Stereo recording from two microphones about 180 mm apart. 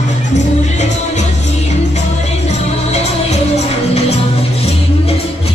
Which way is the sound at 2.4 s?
35° left (ahead or behind).